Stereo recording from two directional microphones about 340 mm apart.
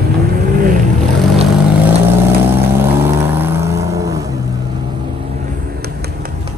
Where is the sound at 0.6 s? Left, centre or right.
Right.